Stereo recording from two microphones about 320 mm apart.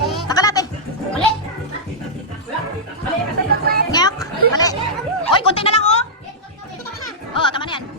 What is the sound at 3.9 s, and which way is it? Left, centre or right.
Chatter, centre.